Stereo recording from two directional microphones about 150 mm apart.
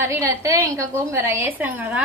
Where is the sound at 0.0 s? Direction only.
20° right (ahead or behind).